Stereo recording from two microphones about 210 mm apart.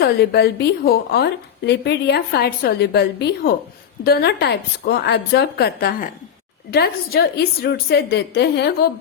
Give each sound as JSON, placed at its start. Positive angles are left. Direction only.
{"t": 0.0, "sound": "a woman's voice", "side_deg": 50}